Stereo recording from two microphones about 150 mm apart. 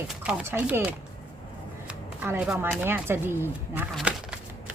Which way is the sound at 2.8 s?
15° right (ahead or behind).